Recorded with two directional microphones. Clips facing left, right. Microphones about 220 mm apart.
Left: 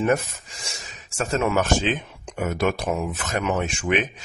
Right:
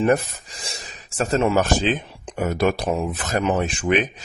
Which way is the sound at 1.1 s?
35° right (ahead or behind).